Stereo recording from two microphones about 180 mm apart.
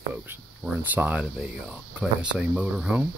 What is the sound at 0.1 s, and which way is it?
Speech, 10° right (ahead or behind).